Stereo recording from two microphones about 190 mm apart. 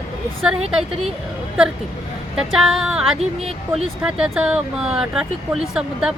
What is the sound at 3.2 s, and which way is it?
Speech, 35° right (ahead or behind).